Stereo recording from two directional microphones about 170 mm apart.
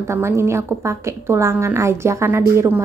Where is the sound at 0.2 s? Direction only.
15° right (ahead or behind).